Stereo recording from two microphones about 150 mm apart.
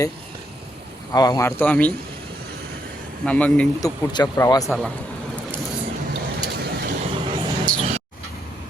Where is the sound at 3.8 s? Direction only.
25° left (ahead or behind).